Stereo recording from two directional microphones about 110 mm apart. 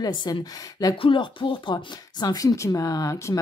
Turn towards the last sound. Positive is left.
turn(degrees=30)  # may be behind; listen again after turning